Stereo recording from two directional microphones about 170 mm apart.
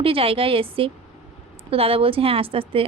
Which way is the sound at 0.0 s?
35° right (ahead or behind).